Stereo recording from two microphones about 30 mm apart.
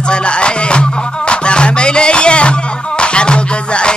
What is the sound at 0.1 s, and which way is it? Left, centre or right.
Music, left.